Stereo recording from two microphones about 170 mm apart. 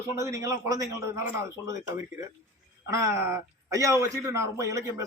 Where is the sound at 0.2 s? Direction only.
20° right (ahead or behind).